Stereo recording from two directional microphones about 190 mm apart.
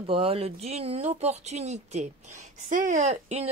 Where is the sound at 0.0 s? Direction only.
30° right (ahead or behind).